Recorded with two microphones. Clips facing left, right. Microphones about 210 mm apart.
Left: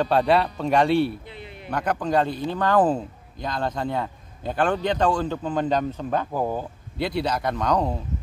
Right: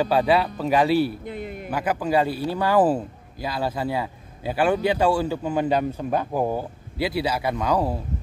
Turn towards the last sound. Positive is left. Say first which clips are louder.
# even
turn(degrees=-5)  # may be behind; listen again after turning